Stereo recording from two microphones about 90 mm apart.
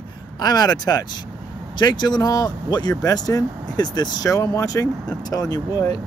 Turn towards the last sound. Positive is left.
turn(degrees=45)  # may be behind; listen again after turning